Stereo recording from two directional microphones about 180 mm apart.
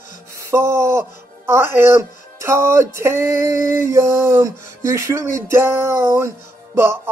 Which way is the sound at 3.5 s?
45° left (ahead or behind).